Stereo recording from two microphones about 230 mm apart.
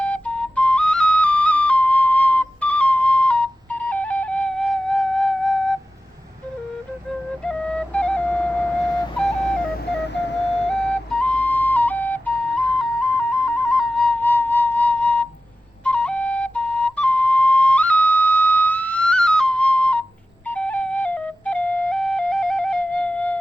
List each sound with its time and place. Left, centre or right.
0.0 s flute: centre
7.1 s flute: centre
10.0 s flute: left
10.9 s flute: centre